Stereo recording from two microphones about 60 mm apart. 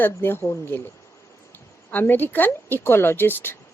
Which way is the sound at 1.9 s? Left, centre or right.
Left.